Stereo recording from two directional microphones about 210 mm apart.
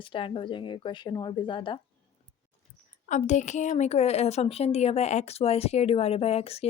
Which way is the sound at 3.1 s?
35° left (ahead or behind).